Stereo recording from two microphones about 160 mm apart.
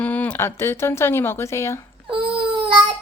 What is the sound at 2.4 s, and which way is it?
Baby cry, 30° right (ahead or behind).